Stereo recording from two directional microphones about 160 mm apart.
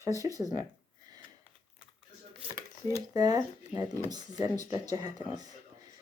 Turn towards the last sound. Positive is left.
turn(degrees=-25)  # may be behind; listen again after turning